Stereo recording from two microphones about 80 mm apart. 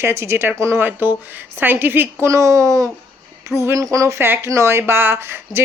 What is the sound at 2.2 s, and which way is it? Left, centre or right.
Speech, right.